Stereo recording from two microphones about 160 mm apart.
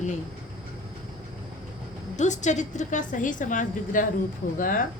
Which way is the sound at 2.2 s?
50° left (ahead or behind).